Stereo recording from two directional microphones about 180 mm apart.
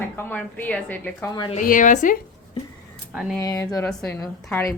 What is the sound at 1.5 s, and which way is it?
Speech, 45° left (ahead or behind).